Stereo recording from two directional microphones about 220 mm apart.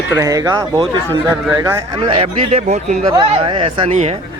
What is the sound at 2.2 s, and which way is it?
Speech, 30° right (ahead or behind).